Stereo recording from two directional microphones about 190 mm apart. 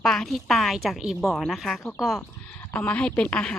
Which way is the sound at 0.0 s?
Centre (ahead or behind).